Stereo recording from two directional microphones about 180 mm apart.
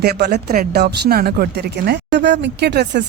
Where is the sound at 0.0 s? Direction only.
65° right (ahead or behind).